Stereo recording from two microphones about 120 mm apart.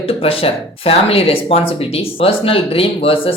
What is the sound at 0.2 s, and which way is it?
Speech, 55° left (ahead or behind).